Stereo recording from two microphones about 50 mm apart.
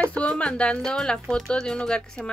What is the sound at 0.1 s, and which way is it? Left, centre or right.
Speech, centre.